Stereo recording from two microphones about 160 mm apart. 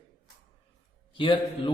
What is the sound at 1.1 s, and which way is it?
Speech, 30° left (ahead or behind).